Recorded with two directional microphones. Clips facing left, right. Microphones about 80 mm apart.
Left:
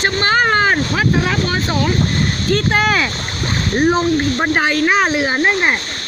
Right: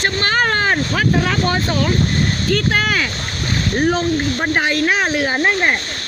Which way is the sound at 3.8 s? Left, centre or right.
Centre.